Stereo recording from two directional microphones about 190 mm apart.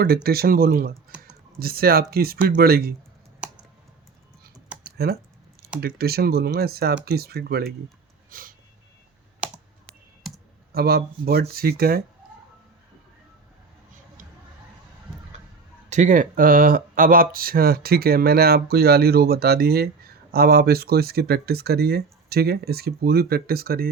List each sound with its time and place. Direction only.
0.0 s speech: 55° right (ahead or behind)
3.4 s computer keyboard: 5° right (ahead or behind)
4.9 s typing: 55° right (ahead or behind)
5.8 s speech: 55° right (ahead or behind)
8.3 s snort: 50° right (ahead or behind)
9.4 s computer keyboard: centre (ahead or behind)
10.7 s speech: 55° right (ahead or behind)
15.9 s speech: 40° right (ahead or behind)